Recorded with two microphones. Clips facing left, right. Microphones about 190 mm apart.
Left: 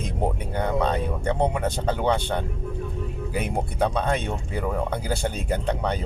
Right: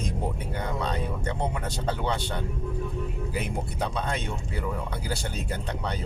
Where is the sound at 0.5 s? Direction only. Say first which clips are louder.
Left 8 dB; 60° left (ahead or behind).